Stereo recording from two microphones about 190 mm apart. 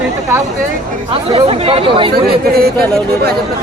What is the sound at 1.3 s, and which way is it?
Speech, 30° right (ahead or behind).